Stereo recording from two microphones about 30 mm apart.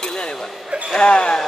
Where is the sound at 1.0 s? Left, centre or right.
Left.